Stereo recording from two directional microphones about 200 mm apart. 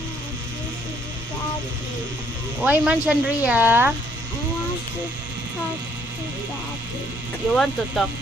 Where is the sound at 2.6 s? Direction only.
5° right (ahead or behind).